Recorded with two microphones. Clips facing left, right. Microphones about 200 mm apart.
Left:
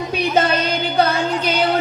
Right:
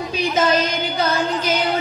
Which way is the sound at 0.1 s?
60° left (ahead or behind).